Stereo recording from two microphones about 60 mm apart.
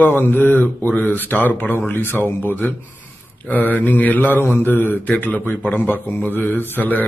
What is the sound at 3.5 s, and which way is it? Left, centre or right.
Mantra, left.